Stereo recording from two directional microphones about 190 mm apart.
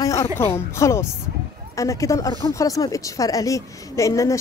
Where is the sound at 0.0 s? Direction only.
15° left (ahead or behind).